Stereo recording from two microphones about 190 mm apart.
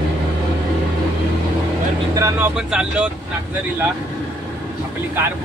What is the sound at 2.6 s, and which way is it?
Speech, 5° right (ahead or behind).